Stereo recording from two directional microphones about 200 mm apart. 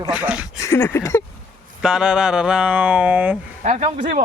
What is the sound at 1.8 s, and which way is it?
Speech, 5° right (ahead or behind).